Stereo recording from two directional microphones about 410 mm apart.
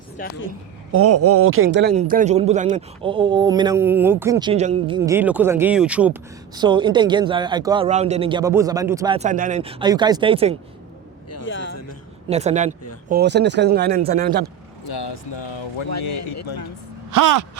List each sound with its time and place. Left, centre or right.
0.2 s speech: centre
0.9 s speech: right; by 10.6 s centre
11.3 s speech: left
12.3 s speech: centre
14.8 s speech: left
15.9 s speech: left
17.1 s gasp: right